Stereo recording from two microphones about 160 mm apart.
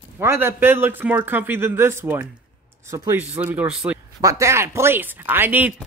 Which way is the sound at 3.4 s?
10° right (ahead or behind).